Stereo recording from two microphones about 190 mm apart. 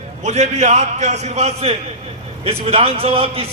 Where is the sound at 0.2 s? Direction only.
35° right (ahead or behind).